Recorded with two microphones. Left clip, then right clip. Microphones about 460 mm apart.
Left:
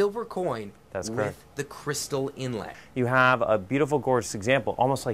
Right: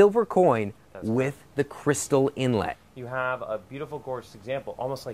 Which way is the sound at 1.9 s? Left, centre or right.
Right.